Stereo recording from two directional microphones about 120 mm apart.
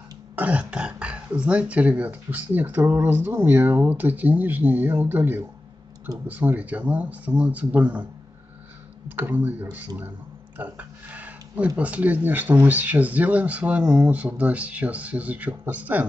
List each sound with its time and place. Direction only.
0.4 s speech: 10° right (ahead or behind)
9.1 s speech: 15° right (ahead or behind)